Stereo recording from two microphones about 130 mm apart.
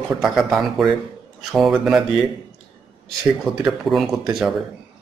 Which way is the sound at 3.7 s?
Centre (ahead or behind).